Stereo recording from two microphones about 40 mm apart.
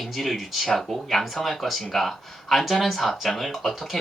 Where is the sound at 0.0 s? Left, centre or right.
Centre.